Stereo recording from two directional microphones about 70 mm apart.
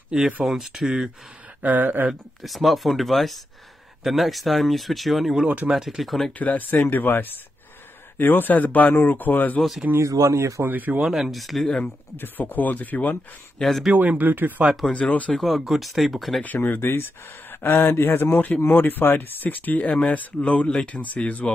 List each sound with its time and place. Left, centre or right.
0.1 s speech: centre
1.6 s speech: right
2.4 s speech: centre
6.3 s speech: left
9.9 s speech: right
10.7 s speech: right
11.0 s speech: centre
12.2 s speech: left
13.6 s speech: centre
13.9 s speech: right
14.9 s speech: centre
15.3 s speech: centre
16.4 s speech: left